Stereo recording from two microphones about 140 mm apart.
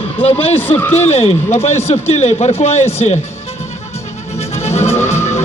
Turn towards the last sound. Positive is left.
turn(degrees=20)  # may be behind; listen again after turning